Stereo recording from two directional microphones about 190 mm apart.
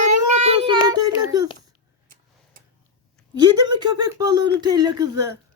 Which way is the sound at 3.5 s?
20° right (ahead or behind).